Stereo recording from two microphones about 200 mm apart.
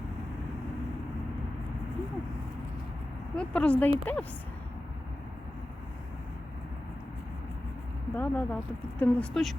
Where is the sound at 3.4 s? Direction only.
5° left (ahead or behind).